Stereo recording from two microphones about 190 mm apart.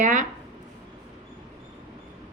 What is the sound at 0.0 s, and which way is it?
Speech, 45° right (ahead or behind).